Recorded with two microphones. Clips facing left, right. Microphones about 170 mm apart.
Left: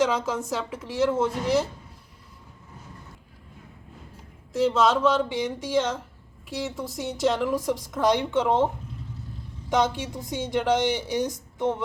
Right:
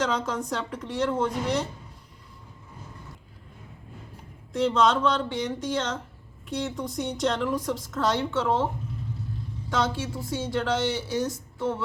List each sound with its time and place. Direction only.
0.0 s speech: 10° left (ahead or behind)
4.5 s speech: 5° left (ahead or behind)